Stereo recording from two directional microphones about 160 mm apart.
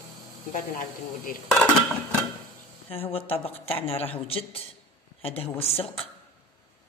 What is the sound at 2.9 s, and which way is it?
A woman's voice, 35° left (ahead or behind).